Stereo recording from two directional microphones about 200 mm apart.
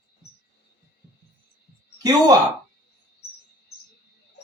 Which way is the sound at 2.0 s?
20° right (ahead or behind).